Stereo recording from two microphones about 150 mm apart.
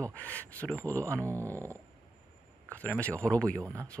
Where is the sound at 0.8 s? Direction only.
20° right (ahead or behind).